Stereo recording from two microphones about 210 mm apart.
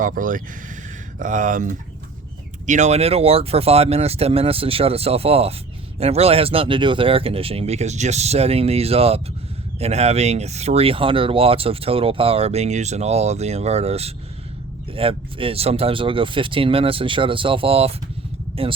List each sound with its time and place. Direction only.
0.0 s speech: 40° right (ahead or behind)